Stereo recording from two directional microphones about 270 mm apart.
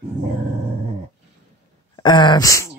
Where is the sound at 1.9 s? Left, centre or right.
Centre.